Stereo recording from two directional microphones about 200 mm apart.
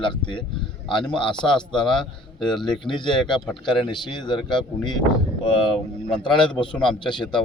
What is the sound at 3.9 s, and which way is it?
Speech, 20° left (ahead or behind).